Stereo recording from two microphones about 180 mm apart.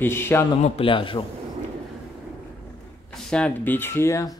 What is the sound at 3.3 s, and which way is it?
Speech, 5° left (ahead or behind).